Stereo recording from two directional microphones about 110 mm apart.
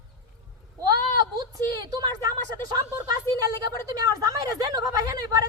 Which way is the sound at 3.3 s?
25° left (ahead or behind).